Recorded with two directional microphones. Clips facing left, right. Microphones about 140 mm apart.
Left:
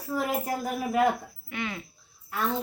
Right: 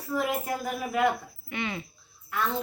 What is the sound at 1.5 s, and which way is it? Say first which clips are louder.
Speech: right 1 dB; centre (ahead or behind).